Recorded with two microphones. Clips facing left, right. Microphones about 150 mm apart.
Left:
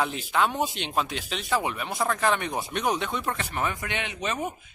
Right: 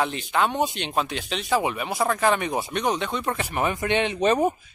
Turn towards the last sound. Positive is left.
turn(degrees=-35)  # may be behind; listen again after turning